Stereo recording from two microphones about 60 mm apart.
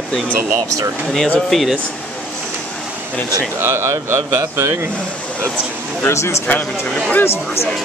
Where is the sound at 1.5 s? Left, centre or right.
Centre.